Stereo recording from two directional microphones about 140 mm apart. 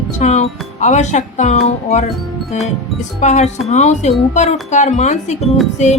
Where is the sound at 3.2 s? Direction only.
55° left (ahead or behind).